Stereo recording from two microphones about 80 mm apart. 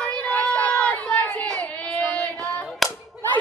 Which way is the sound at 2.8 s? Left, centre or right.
Centre.